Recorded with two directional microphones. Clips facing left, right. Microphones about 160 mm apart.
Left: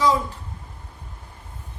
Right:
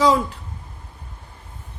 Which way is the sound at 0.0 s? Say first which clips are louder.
Right 3 dB; 80° right.